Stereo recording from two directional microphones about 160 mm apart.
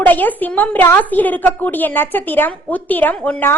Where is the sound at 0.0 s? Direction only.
10° left (ahead or behind).